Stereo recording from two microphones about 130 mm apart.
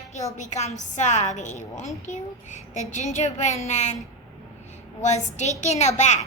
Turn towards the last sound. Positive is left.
turn(degrees=65)  # may be behind; listen again after turning